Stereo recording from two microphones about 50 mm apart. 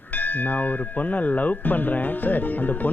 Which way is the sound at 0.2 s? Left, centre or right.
Left.